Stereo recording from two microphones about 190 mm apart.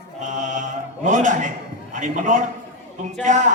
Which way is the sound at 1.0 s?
40° right (ahead or behind).